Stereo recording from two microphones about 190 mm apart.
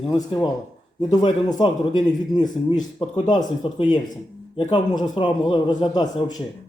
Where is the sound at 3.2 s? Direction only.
25° left (ahead or behind).